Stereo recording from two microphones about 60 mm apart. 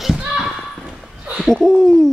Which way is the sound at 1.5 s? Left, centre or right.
Centre.